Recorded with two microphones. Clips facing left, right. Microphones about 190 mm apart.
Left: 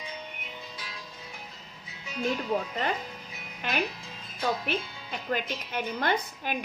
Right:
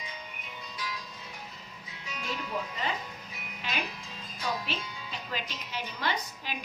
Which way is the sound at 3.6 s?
55° left (ahead or behind).